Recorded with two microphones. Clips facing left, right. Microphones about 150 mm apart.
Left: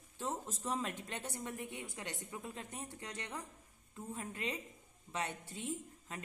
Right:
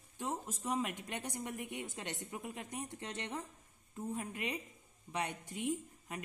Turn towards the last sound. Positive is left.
turn(degrees=-15)  # may be behind; listen again after turning